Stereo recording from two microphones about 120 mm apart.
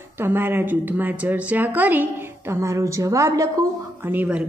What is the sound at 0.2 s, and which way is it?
A woman's voice, 20° right (ahead or behind).